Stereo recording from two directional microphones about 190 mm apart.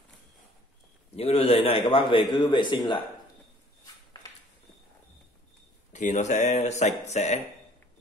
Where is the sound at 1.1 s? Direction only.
30° left (ahead or behind).